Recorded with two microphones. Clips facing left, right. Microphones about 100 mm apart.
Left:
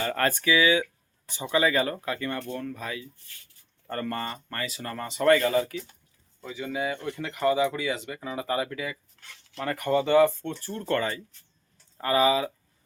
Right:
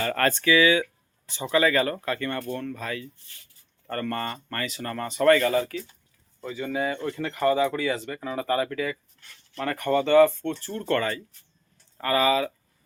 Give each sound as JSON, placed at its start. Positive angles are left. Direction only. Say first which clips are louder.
{"t": 0.0, "sound": "speech", "louder": "right 2 dB", "side_deg": 10}
{"t": 6.4, "sound": "speech", "louder": "right 3 dB", "side_deg": 5}
{"t": 9.2, "sound": "a sound", "louder": "left 3 dB", "side_deg": 90}
{"t": 9.8, "sound": "speech", "louder": "right 2 dB", "side_deg": 15}